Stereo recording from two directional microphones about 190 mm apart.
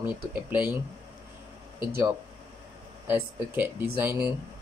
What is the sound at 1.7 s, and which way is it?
Speech, 10° right (ahead or behind).